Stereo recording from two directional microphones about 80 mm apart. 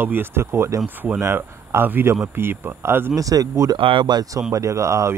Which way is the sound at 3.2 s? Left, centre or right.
Right.